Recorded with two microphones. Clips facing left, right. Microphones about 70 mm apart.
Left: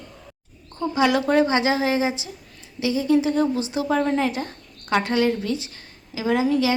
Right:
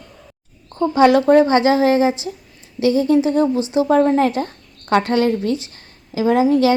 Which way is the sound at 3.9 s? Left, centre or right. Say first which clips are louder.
Right 6 dB; right.